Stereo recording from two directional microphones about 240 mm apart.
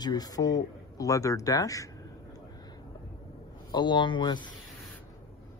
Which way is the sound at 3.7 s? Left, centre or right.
Centre.